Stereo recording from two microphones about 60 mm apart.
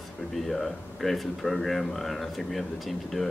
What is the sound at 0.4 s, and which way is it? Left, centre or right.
Speech, centre.